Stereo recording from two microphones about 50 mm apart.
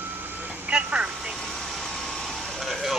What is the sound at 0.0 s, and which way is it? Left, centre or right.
Vehicle, right.